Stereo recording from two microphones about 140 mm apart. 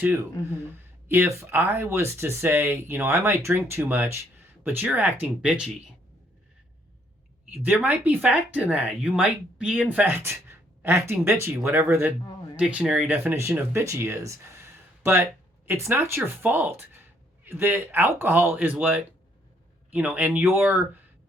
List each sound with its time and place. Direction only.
0.0 s speech: 15° right (ahead or behind)
7.5 s speech: 10° right (ahead or behind)